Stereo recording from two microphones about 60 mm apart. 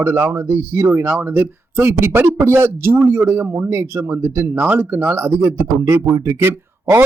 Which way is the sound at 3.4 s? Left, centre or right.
Right.